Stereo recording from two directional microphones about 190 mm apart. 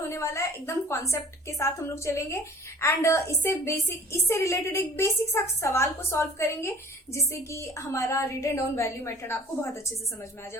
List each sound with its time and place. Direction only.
0.1 s a woman's voice: 15° left (ahead or behind)